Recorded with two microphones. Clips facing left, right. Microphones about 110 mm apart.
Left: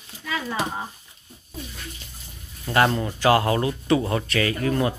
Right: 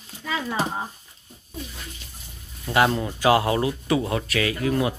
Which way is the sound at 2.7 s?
5° right (ahead or behind).